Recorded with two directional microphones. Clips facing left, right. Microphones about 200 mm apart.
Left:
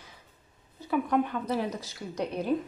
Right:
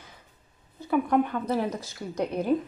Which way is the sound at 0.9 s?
50° right (ahead or behind).